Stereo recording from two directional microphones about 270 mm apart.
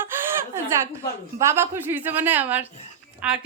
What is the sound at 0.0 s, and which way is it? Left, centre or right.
Laughter, centre.